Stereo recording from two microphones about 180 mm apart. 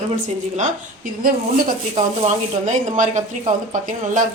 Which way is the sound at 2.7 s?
45° right (ahead or behind).